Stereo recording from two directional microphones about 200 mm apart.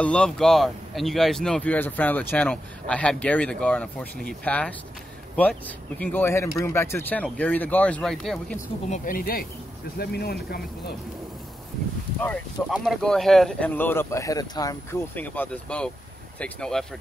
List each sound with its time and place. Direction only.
0.0 s speech: 5° left (ahead or behind)
8.9 s speech: 45° left (ahead or behind)
12.6 s speech: centre (ahead or behind)